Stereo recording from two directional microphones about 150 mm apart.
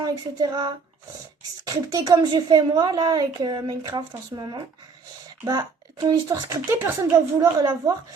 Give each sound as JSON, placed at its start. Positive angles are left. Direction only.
{"t": 0.0, "sound": "speech", "side_deg": -25}